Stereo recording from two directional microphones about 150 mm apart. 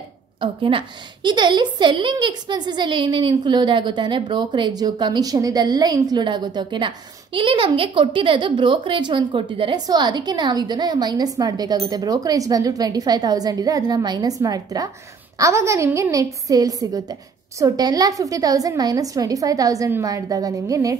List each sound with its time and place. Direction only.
0.4 s a woman's voice: 35° right (ahead or behind)